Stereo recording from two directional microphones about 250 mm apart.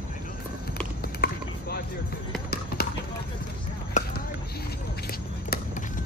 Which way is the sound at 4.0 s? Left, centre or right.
Left.